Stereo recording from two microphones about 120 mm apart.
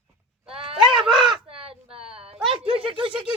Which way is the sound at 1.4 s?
50° right (ahead or behind).